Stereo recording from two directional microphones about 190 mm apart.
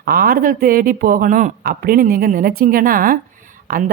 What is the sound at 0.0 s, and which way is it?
Speech, 50° right (ahead or behind).